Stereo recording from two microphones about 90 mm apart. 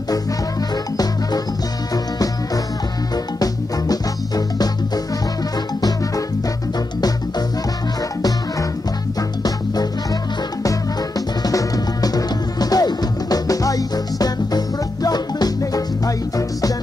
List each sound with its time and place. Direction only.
5.8 s music: 45° left (ahead or behind)
10.6 s music: 40° left (ahead or behind)